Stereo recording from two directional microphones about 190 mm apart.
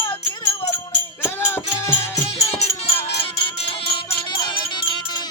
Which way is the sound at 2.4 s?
35° left (ahead or behind).